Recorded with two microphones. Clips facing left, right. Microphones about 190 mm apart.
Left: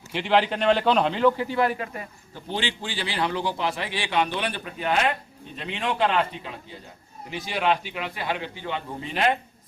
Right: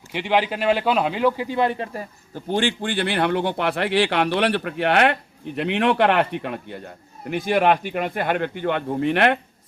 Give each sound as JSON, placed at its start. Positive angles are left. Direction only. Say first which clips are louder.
{"t": 0.1, "sound": "a man's voice", "louder": "right 1 dB", "side_deg": -15}